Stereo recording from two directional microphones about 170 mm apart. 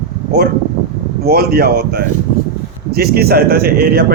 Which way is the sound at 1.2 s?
65° right (ahead or behind).